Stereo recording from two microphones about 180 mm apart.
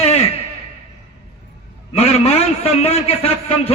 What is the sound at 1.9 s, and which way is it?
A man's voice, 35° left (ahead or behind).